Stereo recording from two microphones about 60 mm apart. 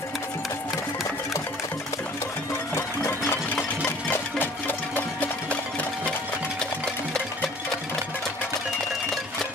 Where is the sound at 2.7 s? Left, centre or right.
Left.